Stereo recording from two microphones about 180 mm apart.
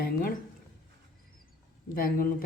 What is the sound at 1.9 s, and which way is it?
Speech, 50° left (ahead or behind).